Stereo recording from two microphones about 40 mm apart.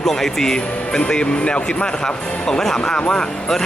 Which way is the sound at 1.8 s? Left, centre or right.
Centre.